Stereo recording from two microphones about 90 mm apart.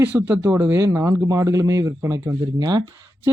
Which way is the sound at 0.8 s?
35° right (ahead or behind).